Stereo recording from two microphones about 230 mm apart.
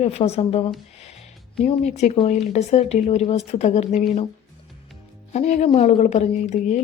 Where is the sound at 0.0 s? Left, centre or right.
Left.